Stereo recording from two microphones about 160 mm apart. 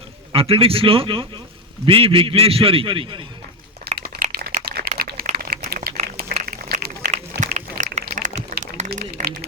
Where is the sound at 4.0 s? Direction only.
70° right (ahead or behind).